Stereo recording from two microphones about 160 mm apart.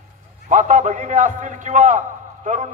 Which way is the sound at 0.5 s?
55° right (ahead or behind).